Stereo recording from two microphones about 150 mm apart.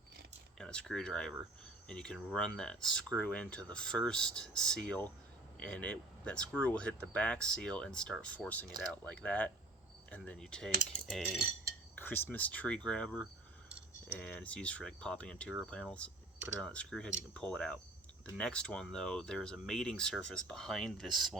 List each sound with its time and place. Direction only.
0.6 s speech: 5° left (ahead or behind)